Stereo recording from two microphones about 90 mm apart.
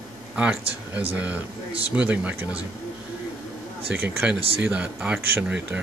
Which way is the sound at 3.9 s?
15° right (ahead or behind).